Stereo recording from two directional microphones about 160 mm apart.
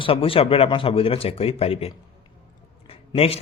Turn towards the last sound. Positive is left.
turn(degrees=40)  # may be behind; listen again after turning